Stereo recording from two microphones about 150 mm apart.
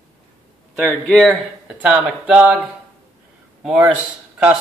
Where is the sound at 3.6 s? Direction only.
5° right (ahead or behind).